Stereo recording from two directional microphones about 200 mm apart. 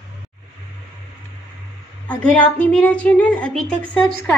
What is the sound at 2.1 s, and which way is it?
A woman's voice, 5° left (ahead or behind).